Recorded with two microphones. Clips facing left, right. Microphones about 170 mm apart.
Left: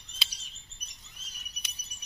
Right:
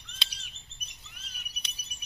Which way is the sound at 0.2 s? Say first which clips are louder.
Even; 5° left (ahead or behind).